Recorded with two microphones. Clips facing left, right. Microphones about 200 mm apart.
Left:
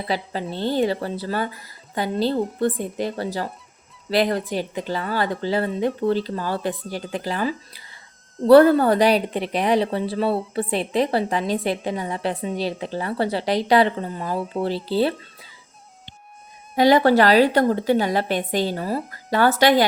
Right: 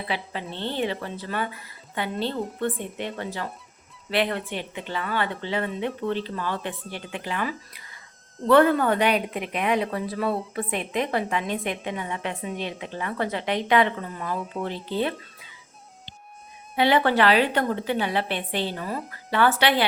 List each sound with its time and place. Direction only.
0.1 s speech: 40° left (ahead or behind)
16.7 s speech: 40° left (ahead or behind)